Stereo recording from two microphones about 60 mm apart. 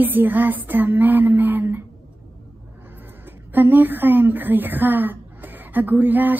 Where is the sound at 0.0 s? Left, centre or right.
Right.